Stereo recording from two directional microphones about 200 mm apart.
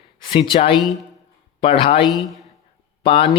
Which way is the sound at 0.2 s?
25° left (ahead or behind).